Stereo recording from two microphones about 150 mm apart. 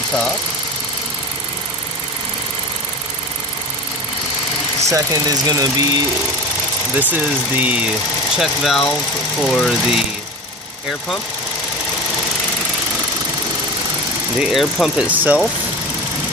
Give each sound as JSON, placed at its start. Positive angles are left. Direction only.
{"t": 4.8, "sound": "speech", "side_deg": -25}
{"t": 7.0, "sound": "speech", "side_deg": -10}
{"t": 14.4, "sound": "speech", "side_deg": 0}